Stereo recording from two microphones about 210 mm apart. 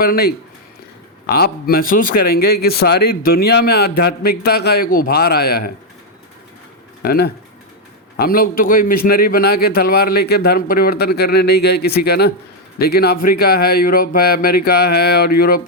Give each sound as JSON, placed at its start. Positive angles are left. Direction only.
{"t": 0.0, "sound": "speech", "side_deg": 45}
{"t": 7.0, "sound": "speech", "side_deg": 45}